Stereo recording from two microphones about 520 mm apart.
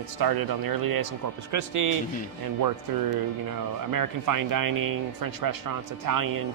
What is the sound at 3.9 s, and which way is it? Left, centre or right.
A man's voice, right.